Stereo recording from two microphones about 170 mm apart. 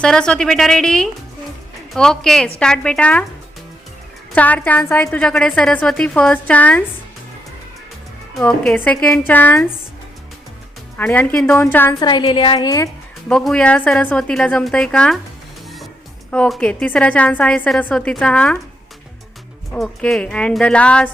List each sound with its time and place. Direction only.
0.0 s a woman's voice: 5° left (ahead or behind)
4.4 s a woman's voice: 10° left (ahead or behind)
8.4 s a woman's voice: 10° left (ahead or behind)
10.9 s a woman's voice: 10° left (ahead or behind)
11.9 s a woman's voice: 25° left (ahead or behind)
13.2 s a woman's voice: 5° left (ahead or behind)
16.3 s a woman's voice: 5° left (ahead or behind)
19.7 s a woman's voice: 5° left (ahead or behind)